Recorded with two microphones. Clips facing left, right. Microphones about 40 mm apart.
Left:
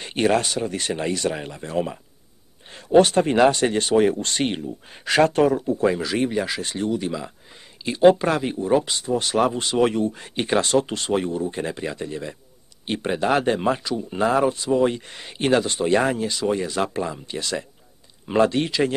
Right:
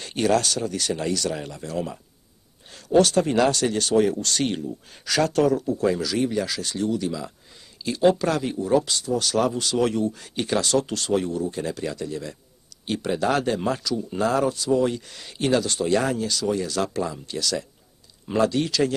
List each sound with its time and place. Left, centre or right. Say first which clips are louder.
0.0 s speech: left 1 dB; left